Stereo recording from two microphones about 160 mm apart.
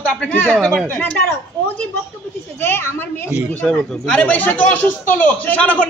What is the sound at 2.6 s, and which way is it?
Speech, 15° left (ahead or behind).